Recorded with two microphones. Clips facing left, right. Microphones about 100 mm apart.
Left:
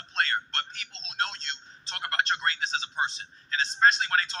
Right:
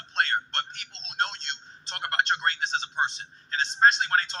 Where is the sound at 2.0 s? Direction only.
40° right (ahead or behind).